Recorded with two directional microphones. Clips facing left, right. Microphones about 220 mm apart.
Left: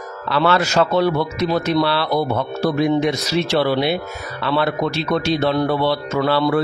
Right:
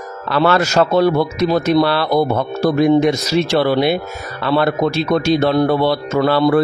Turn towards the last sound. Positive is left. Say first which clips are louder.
# right 4 dB
turn(degrees=-45)  # may be behind; listen again after turning